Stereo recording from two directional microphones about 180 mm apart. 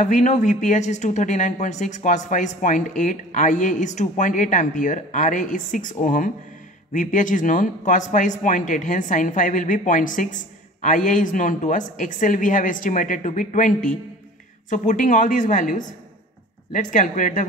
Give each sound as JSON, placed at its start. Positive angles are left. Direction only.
{"t": 0.0, "sound": "speech", "side_deg": 40}